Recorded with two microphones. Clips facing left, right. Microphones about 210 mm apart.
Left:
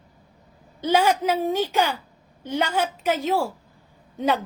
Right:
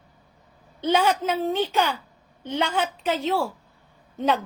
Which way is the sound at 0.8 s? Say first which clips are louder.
Left 1 dB; 10° left (ahead or behind).